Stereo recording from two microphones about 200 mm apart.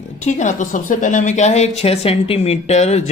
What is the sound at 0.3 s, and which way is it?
A woman's voice, 35° left (ahead or behind).